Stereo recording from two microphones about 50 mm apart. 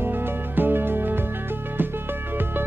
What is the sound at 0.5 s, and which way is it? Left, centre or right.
Music, right.